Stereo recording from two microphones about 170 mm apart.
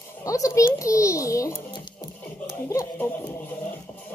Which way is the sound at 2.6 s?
15° left (ahead or behind).